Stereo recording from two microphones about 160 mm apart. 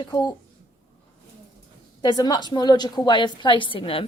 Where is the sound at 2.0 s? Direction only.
25° left (ahead or behind).